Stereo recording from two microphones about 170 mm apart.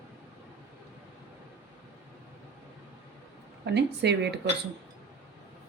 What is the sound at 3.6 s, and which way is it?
Speech, 85° right.